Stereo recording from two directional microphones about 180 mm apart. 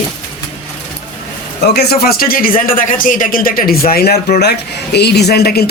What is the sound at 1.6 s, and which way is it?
Speech, 60° left (ahead or behind).